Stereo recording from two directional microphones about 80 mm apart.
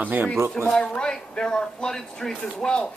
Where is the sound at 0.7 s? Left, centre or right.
Centre.